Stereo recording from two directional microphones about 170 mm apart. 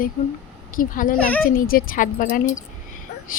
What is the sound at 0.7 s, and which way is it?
Speech, 55° left (ahead or behind).